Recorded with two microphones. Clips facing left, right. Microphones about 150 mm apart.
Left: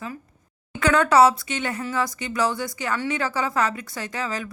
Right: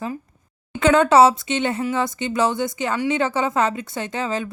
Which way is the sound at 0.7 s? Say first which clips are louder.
Right 3 dB; 25° right (ahead or behind).